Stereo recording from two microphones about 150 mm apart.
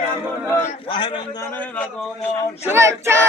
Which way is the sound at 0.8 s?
30° left (ahead or behind).